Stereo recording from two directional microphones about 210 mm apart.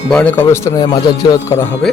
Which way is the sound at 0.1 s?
5° left (ahead or behind).